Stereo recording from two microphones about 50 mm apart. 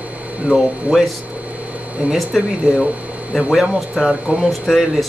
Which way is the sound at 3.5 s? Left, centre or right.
Centre.